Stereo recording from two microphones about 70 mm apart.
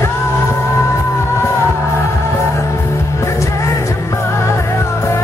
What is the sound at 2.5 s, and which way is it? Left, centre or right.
Music, left.